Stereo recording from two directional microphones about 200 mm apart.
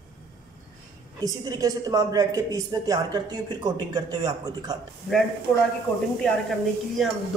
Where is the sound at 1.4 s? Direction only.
20° right (ahead or behind).